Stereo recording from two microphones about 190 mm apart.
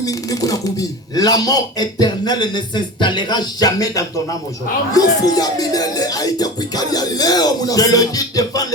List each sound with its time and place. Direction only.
0.0 s speech: 20° left (ahead or behind)